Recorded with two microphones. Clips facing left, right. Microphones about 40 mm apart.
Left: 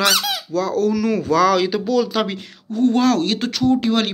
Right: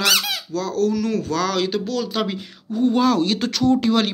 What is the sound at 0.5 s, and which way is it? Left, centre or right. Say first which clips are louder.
Speech: left 5 dB; centre.